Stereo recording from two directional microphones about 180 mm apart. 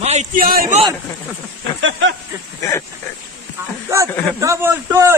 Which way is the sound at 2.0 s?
90° right.